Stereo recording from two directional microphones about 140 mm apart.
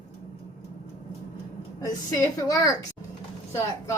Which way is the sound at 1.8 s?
25° left (ahead or behind).